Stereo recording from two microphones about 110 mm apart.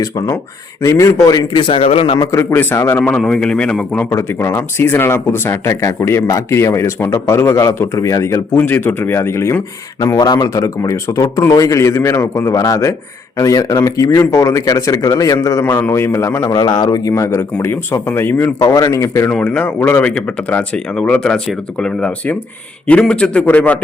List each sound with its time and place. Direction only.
0.8 s speech: 30° left (ahead or behind); by 2.1 s 60° left (ahead or behind)
2.3 s speech: 25° left (ahead or behind)
3.2 s speech: 5° left (ahead or behind)
4.1 s speech: 25° left (ahead or behind)
10.2 s speech: 40° left (ahead or behind)
16.6 s speech: 40° left (ahead or behind); by 18.5 s 20° left (ahead or behind)
18.7 s speech: 30° left (ahead or behind)
19.3 s speech: 10° left (ahead or behind)